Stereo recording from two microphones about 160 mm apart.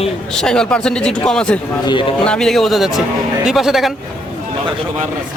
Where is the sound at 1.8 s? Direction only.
30° left (ahead or behind).